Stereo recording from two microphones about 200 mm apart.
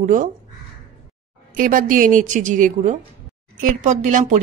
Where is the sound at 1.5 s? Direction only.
45° right (ahead or behind).